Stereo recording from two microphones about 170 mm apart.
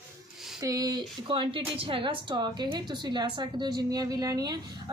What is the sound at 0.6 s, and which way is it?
A woman's voice, 20° right (ahead or behind).